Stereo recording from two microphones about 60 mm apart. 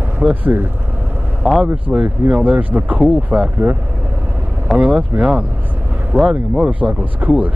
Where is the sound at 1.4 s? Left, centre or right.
Centre.